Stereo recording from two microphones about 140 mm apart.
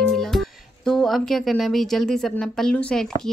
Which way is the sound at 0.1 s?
Centre (ahead or behind).